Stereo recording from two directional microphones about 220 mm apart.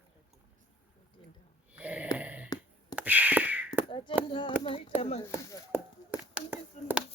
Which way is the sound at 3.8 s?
20° left (ahead or behind).